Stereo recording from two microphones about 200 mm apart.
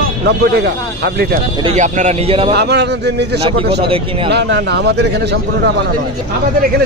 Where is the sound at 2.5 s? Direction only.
55° right (ahead or behind).